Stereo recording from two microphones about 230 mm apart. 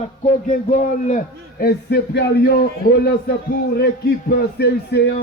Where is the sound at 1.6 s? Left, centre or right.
Left.